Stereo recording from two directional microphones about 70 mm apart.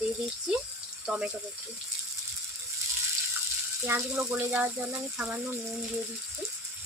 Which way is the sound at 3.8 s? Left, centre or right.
Right.